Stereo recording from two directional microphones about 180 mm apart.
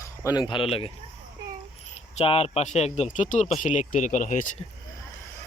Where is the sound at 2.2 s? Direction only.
35° left (ahead or behind).